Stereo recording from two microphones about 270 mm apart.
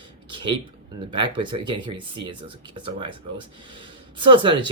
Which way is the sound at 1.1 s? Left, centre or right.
Centre.